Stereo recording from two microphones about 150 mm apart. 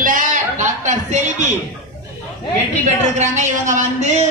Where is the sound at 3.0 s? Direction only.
50° right (ahead or behind).